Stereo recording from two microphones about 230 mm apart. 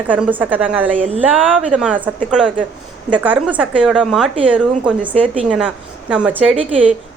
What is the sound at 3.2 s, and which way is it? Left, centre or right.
A woman's voice, centre.